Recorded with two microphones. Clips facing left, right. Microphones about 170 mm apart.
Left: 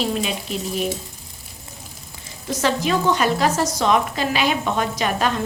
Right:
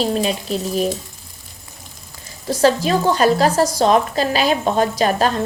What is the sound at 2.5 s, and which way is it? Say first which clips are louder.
A woman's voice: right 5 dB; 35° right (ahead or behind).